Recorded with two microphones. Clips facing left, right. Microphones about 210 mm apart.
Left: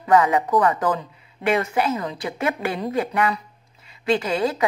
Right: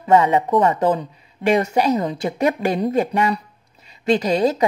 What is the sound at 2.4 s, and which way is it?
A woman's voice, 40° right (ahead or behind).